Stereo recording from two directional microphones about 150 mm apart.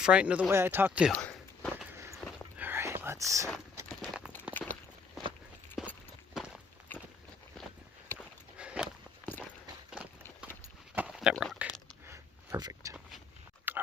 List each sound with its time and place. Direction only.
0.0 s speech: 5° right (ahead or behind)
1.1 s a sound: 5° left (ahead or behind)
2.6 s whispering: 15° right (ahead or behind)
4.5 s walk: 5° left (ahead or behind)
5.8 s a sound: centre (ahead or behind)
6.3 s walk: 5° right (ahead or behind)
8.0 s walk: 15° left (ahead or behind)
8.5 s walk: 5° right (ahead or behind)
9.9 s clip-clop: 5° right (ahead or behind)
10.9 s a sound: 5° right (ahead or behind)
12.0 s a sound: 20° right (ahead or behind)
13.7 s pig: 10° right (ahead or behind)